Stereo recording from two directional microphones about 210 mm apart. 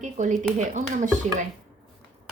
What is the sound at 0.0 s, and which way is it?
Speech, 35° right (ahead or behind).